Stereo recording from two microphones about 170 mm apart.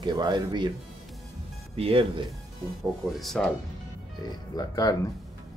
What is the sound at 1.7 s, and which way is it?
Speech, 35° right (ahead or behind).